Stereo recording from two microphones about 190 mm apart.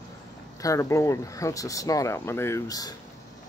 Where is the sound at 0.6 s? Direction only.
15° left (ahead or behind).